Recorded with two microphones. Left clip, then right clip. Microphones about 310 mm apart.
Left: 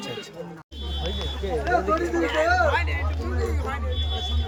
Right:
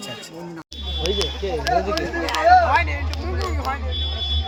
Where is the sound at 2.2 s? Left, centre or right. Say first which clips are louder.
Right 8 dB; centre.